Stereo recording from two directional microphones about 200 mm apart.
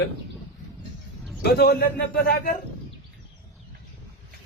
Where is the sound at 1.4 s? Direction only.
50° left (ahead or behind).